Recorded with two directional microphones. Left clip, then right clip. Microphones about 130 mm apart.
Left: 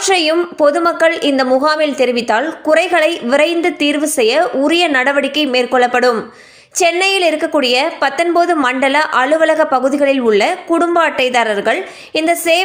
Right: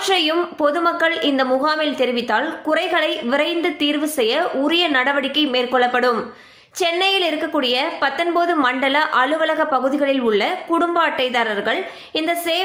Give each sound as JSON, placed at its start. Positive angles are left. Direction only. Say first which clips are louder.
{"t": 0.0, "sound": "a woman's voice", "louder": "left 5 dB", "side_deg": 50}